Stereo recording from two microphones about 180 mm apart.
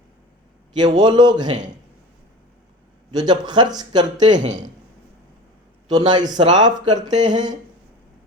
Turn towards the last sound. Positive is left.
turn(degrees=-25)  # may be behind; listen again after turning